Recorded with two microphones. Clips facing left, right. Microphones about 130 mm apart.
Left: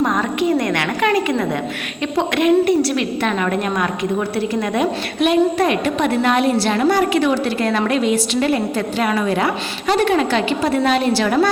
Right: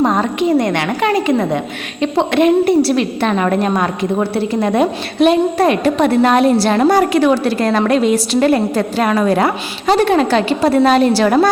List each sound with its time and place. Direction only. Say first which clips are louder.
0.0 s a woman's voice: right 3 dB; 30° right (ahead or behind)